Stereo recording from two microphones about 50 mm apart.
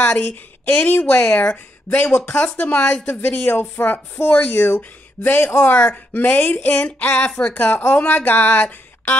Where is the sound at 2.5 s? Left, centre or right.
Left.